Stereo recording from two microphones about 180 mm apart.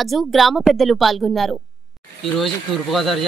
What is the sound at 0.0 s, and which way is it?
Speech, centre (ahead or behind).